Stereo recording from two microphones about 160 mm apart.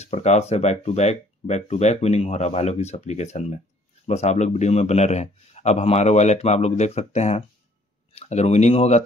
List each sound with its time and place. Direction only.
0.0 s speech: 45° left (ahead or behind)